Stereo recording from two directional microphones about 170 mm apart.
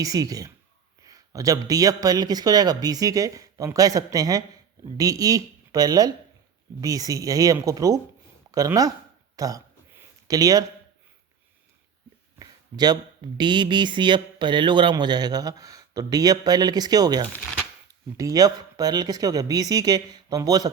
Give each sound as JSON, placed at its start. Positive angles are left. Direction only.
{"t": 0.0, "sound": "speech", "side_deg": -20}
{"t": 9.3, "sound": "a sound", "side_deg": -20}
{"t": 12.4, "sound": "speech", "side_deg": -25}